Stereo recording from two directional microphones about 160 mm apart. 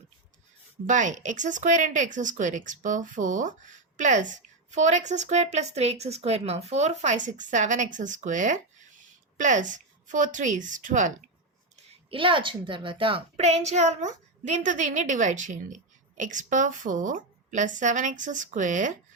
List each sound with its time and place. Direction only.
0.9 s speech: 50° right (ahead or behind)
12.1 s speech: 30° right (ahead or behind); by 18.9 s 50° right (ahead or behind)